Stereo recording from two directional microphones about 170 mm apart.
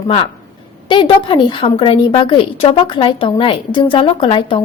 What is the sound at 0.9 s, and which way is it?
A woman's voice, 30° left (ahead or behind).